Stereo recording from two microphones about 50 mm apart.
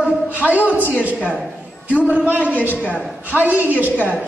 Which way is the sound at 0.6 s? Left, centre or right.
Left.